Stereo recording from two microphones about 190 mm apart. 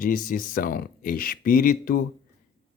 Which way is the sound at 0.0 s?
45° left (ahead or behind).